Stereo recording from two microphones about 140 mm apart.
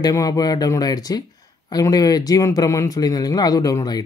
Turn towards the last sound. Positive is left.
turn(degrees=30)  # may be behind; listen again after turning